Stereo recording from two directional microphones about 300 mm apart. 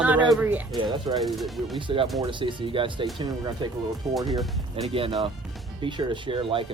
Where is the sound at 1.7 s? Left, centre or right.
Centre.